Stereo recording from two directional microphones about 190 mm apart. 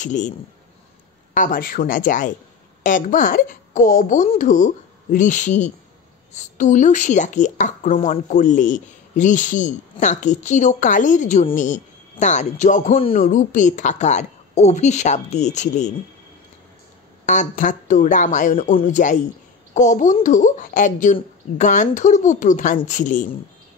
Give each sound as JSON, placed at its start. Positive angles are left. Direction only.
{"t": 0.0, "sound": "speech", "side_deg": 40}
{"t": 1.3, "sound": "speech", "side_deg": 45}
{"t": 17.3, "sound": "speech", "side_deg": 40}